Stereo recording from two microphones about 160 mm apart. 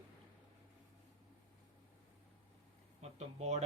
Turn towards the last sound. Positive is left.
turn(degrees=-45)  # may be behind; listen again after turning